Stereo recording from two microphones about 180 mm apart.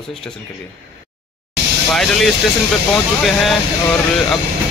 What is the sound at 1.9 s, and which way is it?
Speech, centre (ahead or behind).